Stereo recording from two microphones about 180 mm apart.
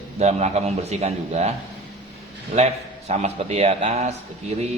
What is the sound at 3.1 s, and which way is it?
A man's voice, 40° right (ahead or behind).